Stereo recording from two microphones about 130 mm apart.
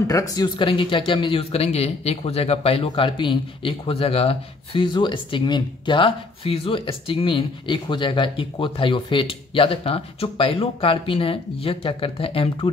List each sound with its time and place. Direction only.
0.0 s speech: 25° left (ahead or behind)
0.7 s speech: 40° left (ahead or behind)